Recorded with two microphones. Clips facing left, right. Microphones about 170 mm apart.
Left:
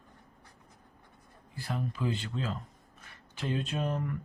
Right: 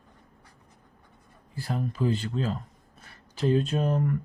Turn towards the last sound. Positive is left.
turn(degrees=-40)  # may be behind; listen again after turning